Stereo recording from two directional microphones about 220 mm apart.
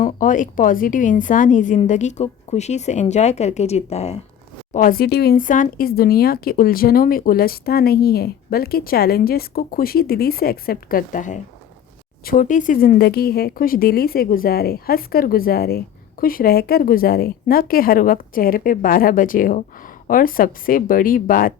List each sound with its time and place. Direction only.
0.0 s speech: 35° left (ahead or behind)
4.7 s speech: 40° left (ahead or behind)